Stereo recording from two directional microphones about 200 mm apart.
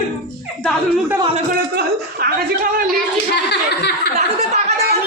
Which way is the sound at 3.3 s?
60° left (ahead or behind).